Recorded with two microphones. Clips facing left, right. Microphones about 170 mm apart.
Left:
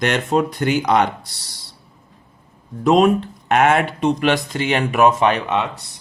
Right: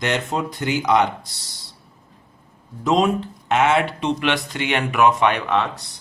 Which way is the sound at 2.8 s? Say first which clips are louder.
Left 4 dB; 60° left (ahead or behind).